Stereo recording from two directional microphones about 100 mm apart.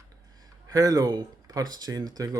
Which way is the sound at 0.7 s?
40° right (ahead or behind).